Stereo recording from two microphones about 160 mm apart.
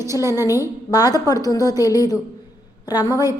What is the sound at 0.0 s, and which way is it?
Speech, 15° right (ahead or behind).